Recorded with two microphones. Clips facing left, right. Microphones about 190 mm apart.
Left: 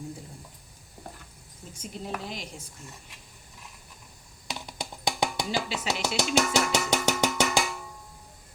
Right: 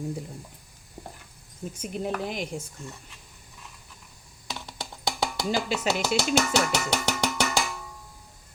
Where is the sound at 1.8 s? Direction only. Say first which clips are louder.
Right 6 dB; 55° right (ahead or behind).